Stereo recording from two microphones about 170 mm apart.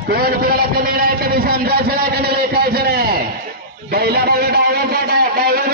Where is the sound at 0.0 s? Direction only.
65° right (ahead or behind).